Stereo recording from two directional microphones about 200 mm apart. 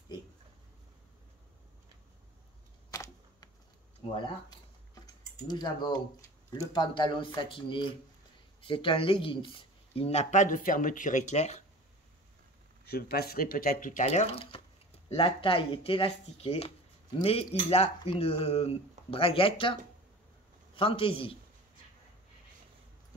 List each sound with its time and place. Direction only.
2.9 s a sound: 15° left (ahead or behind)
5.0 s speech: 20° left (ahead or behind)
12.8 s speech: 50° left (ahead or behind); by 21.4 s 25° left (ahead or behind)